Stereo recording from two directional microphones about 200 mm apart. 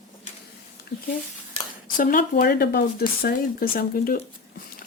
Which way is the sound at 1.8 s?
45° left (ahead or behind).